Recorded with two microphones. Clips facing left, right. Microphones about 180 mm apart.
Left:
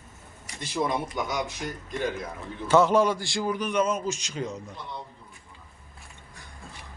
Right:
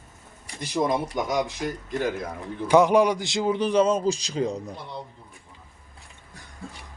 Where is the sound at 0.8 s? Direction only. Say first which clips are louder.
Right 3 dB; 15° right (ahead or behind).